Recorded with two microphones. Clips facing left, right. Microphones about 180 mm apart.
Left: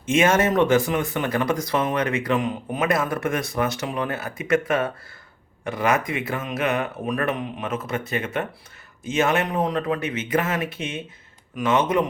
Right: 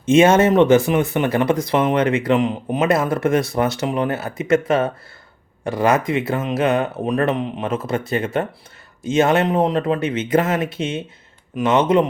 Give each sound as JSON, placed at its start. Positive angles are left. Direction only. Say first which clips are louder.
{"t": 0.1, "sound": "speech", "louder": "right 6 dB", "side_deg": -30}